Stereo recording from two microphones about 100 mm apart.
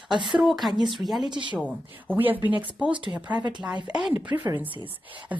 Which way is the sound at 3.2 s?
50° right (ahead or behind).